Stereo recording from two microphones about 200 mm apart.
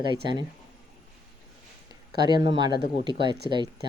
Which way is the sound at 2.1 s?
20° right (ahead or behind).